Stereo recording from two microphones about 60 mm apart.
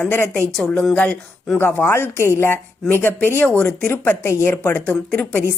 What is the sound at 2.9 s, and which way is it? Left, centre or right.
Speech, left.